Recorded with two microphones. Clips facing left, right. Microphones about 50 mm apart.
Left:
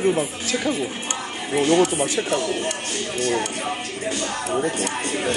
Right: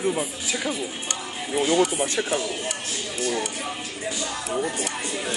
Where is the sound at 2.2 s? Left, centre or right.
Left.